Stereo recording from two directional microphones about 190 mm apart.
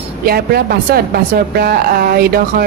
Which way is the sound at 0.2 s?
55° right (ahead or behind).